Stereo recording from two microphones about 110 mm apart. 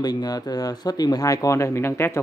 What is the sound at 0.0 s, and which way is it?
Speech, 35° left (ahead or behind).